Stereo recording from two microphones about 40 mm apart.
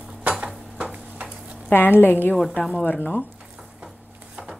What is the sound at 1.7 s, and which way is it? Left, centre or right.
Speech, left.